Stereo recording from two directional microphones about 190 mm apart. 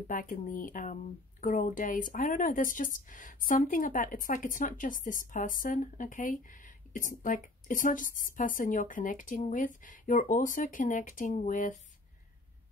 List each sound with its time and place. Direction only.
0.1 s speech: 50° left (ahead or behind)